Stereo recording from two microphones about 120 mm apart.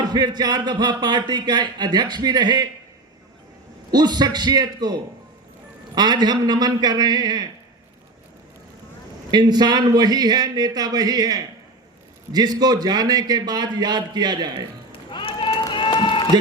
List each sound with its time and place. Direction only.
0.0 s speech: 35° right (ahead or behind)
3.9 s speech: 35° right (ahead or behind)
9.3 s speech: 35° right (ahead or behind)
15.1 s run: 45° left (ahead or behind)